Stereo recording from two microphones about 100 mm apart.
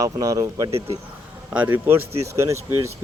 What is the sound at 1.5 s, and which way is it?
Speech, 15° right (ahead or behind).